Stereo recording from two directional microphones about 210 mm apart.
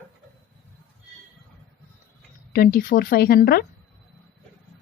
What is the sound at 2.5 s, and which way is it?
A woman's voice, 45° left (ahead or behind).